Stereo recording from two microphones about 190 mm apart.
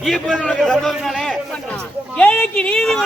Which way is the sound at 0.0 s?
5° left (ahead or behind).